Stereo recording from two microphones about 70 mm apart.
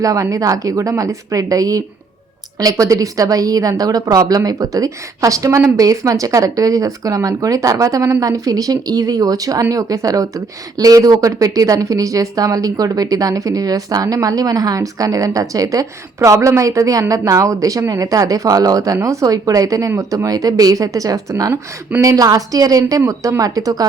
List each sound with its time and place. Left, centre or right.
0.0 s a woman's voice: right